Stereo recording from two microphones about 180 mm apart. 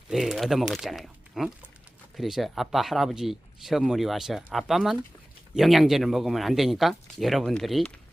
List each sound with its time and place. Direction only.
0.1 s speech: centre (ahead or behind)